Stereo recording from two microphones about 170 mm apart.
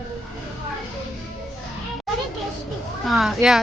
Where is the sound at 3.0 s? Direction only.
Centre (ahead or behind).